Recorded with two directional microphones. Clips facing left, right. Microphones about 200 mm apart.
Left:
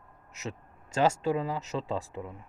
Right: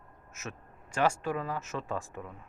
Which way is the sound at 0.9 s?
20° left (ahead or behind).